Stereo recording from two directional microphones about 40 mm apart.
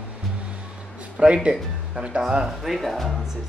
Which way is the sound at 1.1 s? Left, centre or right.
Right.